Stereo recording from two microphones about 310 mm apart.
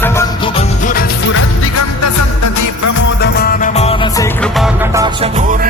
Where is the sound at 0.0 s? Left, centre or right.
Centre; by 2.9 s left.